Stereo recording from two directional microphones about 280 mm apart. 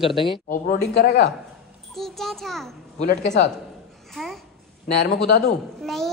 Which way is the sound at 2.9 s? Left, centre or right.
Left.